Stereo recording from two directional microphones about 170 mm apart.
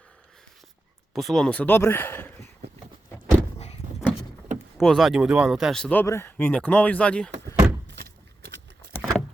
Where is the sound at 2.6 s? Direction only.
70° right (ahead or behind).